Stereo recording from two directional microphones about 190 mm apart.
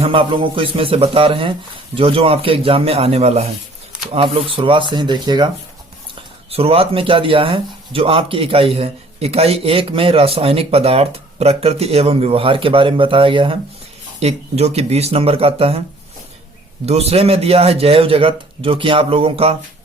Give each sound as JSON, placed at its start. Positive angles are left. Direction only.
{"t": 0.0, "sound": "speech", "side_deg": -25}
{"t": 6.5, "sound": "speech", "side_deg": -30}
{"t": 16.8, "sound": "speech", "side_deg": -35}